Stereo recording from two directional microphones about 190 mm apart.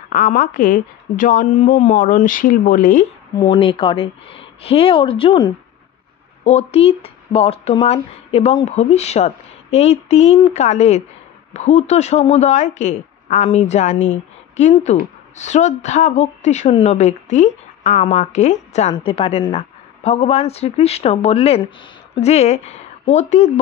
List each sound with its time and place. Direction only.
0.1 s a woman's voice: 45° left (ahead or behind)
3.3 s speech: 25° left (ahead or behind)